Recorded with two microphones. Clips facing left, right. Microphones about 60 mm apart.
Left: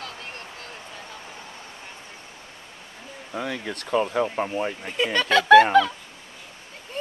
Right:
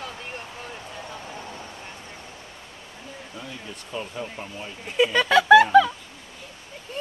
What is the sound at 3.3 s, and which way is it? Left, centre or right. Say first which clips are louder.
Speech: left 11 dB; left.